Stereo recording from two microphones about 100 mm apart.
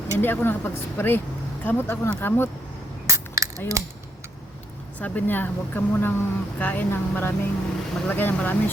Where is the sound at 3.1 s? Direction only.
30° right (ahead or behind).